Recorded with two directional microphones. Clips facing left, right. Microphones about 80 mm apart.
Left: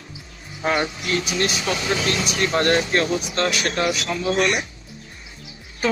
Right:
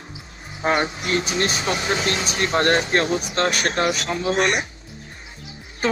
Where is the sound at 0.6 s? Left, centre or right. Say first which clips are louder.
Right 1 dB; right.